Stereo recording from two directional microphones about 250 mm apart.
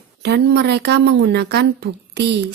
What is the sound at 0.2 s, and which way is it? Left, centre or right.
A woman's voice, right.